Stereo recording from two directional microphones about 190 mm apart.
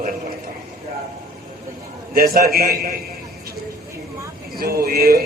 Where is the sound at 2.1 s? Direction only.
50° right (ahead or behind).